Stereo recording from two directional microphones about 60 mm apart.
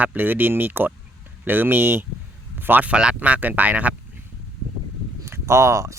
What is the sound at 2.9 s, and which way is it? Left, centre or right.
Speech, centre.